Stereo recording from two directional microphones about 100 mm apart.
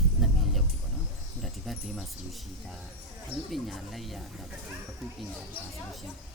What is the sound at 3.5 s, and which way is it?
Speech, centre (ahead or behind).